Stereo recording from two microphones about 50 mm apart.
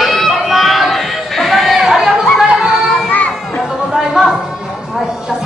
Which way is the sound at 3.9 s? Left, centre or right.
Centre.